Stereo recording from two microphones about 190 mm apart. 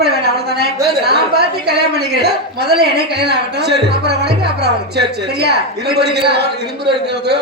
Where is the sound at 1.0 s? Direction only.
60° right (ahead or behind).